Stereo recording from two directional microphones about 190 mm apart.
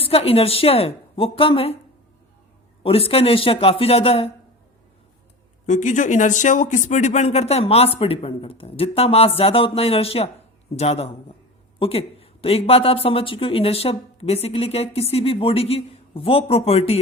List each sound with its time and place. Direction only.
0.0 s speech: 30° left (ahead or behind)
2.8 s speech: 30° left (ahead or behind)
5.6 s speech: 40° left (ahead or behind)